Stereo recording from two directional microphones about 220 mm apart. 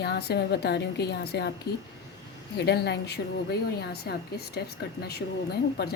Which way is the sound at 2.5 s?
50° left (ahead or behind).